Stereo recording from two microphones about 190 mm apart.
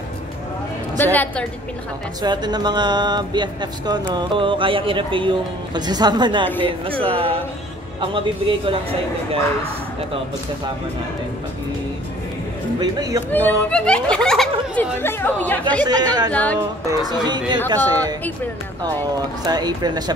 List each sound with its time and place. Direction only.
0.9 s a woman's voice: 10° left (ahead or behind)
2.2 s speech: 20° right (ahead or behind)
12.8 s speech: 20° right (ahead or behind)
13.3 s speech: 5° left (ahead or behind)
15.8 s speech: 20° right (ahead or behind)
16.3 s speech: 5° left (ahead or behind)
16.8 s speech: 20° right (ahead or behind)
19.1 s speech: 20° right (ahead or behind)